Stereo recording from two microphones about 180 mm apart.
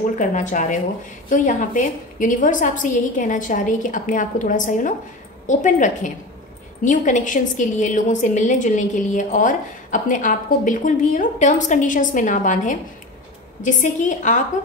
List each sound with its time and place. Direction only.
0.2 s a woman's voice: 45° left (ahead or behind)